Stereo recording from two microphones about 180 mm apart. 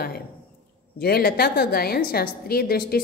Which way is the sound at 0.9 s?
60° left (ahead or behind).